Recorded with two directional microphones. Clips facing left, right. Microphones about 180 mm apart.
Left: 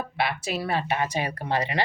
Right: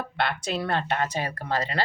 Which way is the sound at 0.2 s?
5° left (ahead or behind).